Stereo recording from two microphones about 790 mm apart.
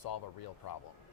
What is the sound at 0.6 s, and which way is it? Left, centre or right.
Speech, left.